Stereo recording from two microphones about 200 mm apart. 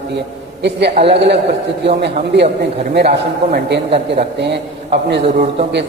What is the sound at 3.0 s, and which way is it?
A man's voice, 55° right (ahead or behind).